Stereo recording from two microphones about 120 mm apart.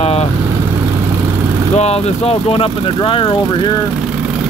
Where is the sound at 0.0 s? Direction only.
55° left (ahead or behind).